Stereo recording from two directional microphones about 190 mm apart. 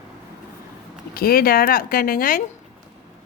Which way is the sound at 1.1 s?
50° left (ahead or behind).